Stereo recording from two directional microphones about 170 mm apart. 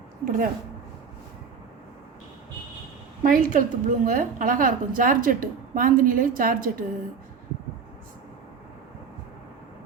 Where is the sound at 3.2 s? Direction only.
55° right (ahead or behind).